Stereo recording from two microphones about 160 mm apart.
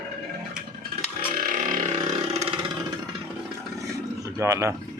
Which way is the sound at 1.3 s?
60° right (ahead or behind).